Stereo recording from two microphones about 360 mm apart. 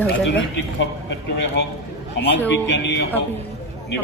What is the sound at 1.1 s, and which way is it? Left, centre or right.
Speech, left.